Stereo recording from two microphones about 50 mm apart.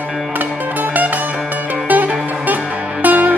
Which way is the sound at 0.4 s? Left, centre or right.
Right.